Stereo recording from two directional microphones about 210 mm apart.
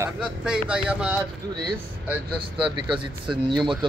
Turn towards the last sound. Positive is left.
turn(degrees=-20)  # may be behind; listen again after turning